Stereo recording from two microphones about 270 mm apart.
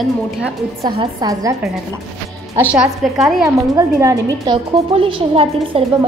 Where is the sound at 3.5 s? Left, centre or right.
Centre.